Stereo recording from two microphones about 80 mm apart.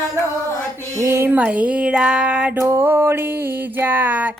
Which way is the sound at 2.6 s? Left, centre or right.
Right.